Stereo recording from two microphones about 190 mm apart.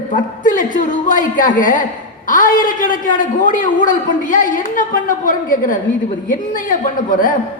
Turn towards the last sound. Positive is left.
turn(degrees=45)  # may be behind; listen again after turning